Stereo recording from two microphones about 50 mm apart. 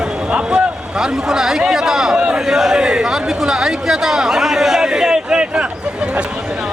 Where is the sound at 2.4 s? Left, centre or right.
Centre.